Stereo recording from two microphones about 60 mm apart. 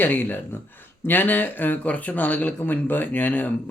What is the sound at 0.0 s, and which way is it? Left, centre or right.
Speech, left.